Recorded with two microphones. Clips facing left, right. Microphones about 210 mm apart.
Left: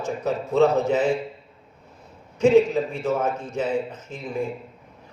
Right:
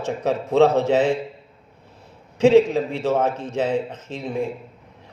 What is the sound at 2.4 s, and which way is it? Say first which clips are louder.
A man's voice: right 2 dB; 75° right (ahead or behind).